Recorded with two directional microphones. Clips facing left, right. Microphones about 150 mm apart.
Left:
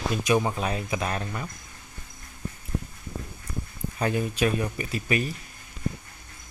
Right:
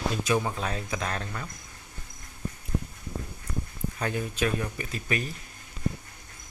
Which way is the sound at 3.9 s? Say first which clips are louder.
Left 5 dB; 15° left (ahead or behind).